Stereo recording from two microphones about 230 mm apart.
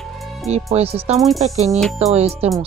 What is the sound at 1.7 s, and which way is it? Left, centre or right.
Speech, centre.